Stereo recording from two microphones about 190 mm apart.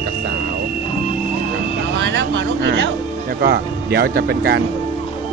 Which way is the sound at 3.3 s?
55° right (ahead or behind).